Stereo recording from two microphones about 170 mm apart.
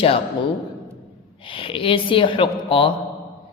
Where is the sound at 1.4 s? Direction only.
30° left (ahead or behind).